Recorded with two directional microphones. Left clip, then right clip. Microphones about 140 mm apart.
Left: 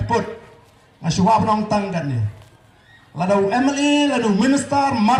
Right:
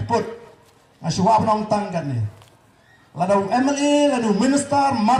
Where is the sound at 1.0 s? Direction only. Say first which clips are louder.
Even; 45° right (ahead or behind).